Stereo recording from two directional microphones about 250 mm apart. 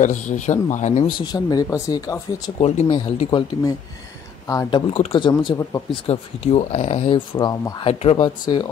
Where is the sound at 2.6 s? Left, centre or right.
Left.